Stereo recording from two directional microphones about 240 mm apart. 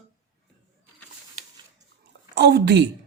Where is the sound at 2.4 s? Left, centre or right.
Right.